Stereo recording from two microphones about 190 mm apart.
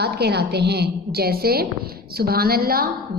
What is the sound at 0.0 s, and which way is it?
A woman's voice, 60° right (ahead or behind).